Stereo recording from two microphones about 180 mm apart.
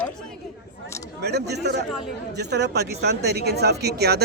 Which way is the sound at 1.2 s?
65° right (ahead or behind).